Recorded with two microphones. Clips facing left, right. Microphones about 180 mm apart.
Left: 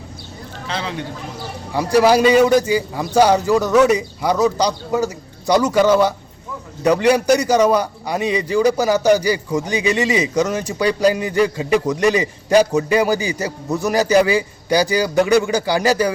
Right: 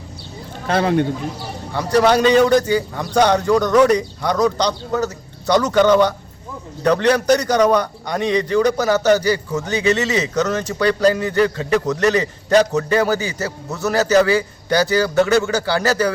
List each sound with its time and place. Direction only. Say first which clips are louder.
0.7 s a man's voice: right 9 dB; 55° right (ahead or behind)
1.7 s a man's voice: left 1 dB; 10° left (ahead or behind)